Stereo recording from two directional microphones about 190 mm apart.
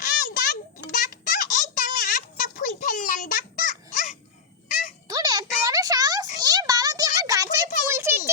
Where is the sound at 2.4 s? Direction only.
45° left (ahead or behind).